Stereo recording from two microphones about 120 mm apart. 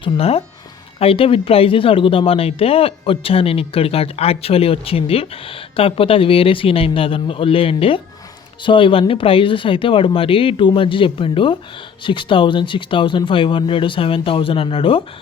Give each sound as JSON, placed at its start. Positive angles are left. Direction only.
{"t": 0.0, "sound": "speech", "side_deg": 55}